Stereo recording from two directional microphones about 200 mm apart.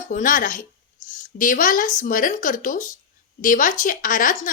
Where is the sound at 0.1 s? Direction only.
40° left (ahead or behind).